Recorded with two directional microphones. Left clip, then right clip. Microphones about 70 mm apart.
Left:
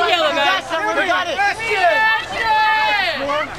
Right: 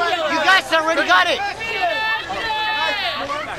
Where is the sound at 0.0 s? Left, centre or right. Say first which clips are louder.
Left 4 dB; left.